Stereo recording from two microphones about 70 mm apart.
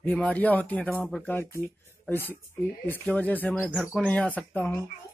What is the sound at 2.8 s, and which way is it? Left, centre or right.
Speech, left.